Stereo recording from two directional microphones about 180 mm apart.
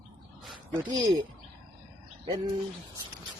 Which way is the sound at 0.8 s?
25° right (ahead or behind).